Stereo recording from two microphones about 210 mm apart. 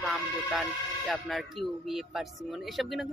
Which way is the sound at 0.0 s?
Centre (ahead or behind).